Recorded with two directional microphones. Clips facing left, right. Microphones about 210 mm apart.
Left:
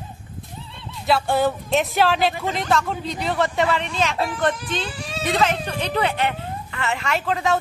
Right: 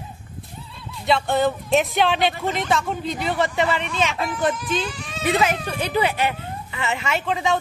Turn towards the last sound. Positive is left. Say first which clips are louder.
# left 1 dB
turn(degrees=0)  # may be behind; listen again after turning